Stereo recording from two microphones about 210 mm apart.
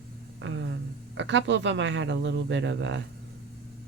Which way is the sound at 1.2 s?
60° right (ahead or behind).